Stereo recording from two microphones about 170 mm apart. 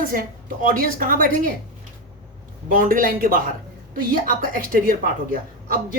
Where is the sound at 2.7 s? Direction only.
55° right (ahead or behind).